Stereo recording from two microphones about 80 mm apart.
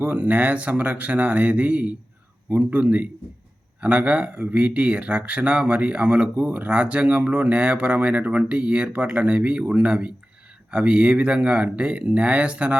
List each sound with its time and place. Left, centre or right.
0.0 s speech: right